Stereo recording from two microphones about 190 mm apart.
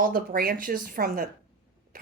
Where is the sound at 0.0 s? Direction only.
50° right (ahead or behind).